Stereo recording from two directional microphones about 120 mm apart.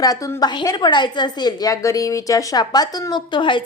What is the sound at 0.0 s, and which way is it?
A woman's voice, 30° left (ahead or behind).